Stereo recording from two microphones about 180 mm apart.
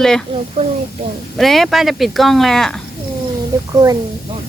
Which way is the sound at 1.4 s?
Centre (ahead or behind).